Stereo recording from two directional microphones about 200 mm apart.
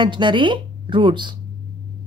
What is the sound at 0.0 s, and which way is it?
Speech, 25° right (ahead or behind).